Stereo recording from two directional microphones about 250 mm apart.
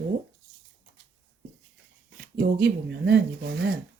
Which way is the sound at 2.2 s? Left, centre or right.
Right.